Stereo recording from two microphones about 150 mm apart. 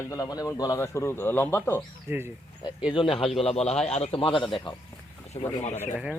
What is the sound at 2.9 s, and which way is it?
Speech, 35° left (ahead or behind).